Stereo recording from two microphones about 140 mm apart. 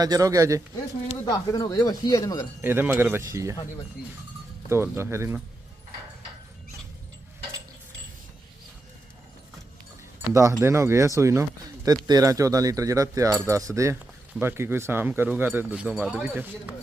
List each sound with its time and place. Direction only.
0.0 s cutlery: 25° right (ahead or behind)
1.2 s speech: 30° left (ahead or behind)
2.6 s speech: 15° right (ahead or behind)
4.7 s speech: 15° right (ahead or behind)
10.3 s cutlery: 20° right (ahead or behind)
14.4 s speech: 15° right (ahead or behind)